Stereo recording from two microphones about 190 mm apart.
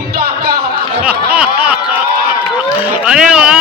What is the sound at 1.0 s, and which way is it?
Snicker, 10° right (ahead or behind).